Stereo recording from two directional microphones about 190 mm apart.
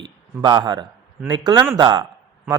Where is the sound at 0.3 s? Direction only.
20° right (ahead or behind).